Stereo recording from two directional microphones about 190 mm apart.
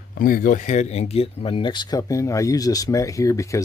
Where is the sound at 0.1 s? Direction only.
50° left (ahead or behind).